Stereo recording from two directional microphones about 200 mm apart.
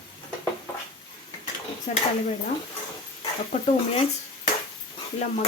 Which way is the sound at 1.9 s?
35° left (ahead or behind).